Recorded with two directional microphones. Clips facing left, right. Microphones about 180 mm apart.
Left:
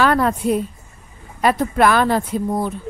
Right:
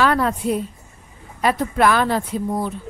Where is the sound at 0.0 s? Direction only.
50° left (ahead or behind).